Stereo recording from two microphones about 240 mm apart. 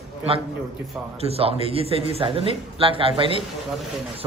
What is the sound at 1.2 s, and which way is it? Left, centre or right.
Speech, right.